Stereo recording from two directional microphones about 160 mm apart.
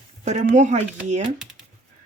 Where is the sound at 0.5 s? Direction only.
50° right (ahead or behind).